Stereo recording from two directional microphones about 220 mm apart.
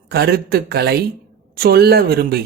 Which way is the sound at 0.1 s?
45° right (ahead or behind).